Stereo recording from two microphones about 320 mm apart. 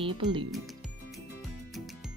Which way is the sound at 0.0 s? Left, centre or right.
Centre.